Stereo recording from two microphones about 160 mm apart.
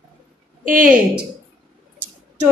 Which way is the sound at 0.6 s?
60° right (ahead or behind).